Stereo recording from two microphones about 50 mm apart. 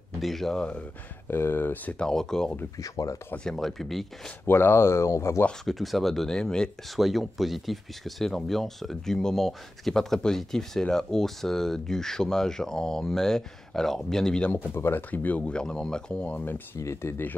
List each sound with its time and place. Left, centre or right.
0.2 s speech: centre
0.6 s speech: left
1.3 s speech: left
2.0 s speech: centre
4.5 s speech: left
5.7 s speech: centre
7.0 s speech: centre
14.5 s speech: left
15.0 s speech: left
15.5 s speech: centre
16.7 s speech: left